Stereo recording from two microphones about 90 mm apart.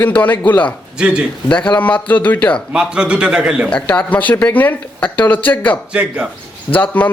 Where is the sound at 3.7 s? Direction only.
15° left (ahead or behind).